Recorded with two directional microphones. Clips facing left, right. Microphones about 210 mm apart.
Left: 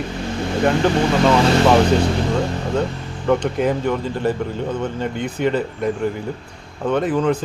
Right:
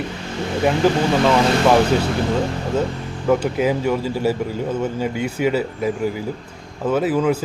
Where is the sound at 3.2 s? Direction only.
5° right (ahead or behind).